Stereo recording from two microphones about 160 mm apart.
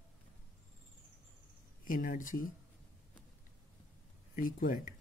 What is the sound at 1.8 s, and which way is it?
Speech, 60° left (ahead or behind).